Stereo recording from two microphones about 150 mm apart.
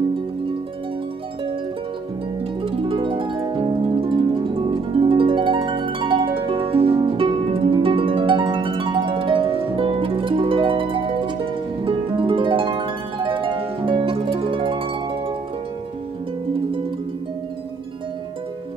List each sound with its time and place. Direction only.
2.6 s harp: 35° right (ahead or behind)